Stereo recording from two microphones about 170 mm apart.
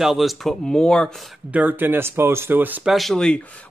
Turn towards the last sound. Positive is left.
turn(degrees=5)  # may be behind; listen again after turning